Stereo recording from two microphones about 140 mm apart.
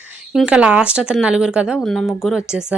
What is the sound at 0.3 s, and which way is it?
A woman's voice, 5° right (ahead or behind).